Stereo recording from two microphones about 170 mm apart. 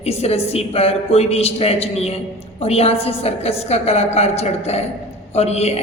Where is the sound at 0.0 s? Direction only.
35° left (ahead or behind).